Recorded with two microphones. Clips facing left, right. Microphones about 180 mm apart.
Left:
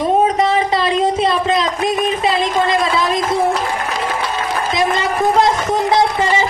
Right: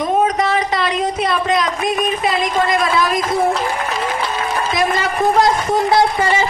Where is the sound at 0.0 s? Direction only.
30° left (ahead or behind).